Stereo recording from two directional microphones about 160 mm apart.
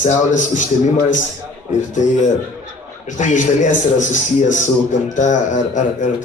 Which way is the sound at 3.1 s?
50° left (ahead or behind).